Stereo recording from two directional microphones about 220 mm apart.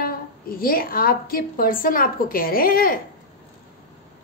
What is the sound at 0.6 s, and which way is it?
A woman's voice, 40° left (ahead or behind).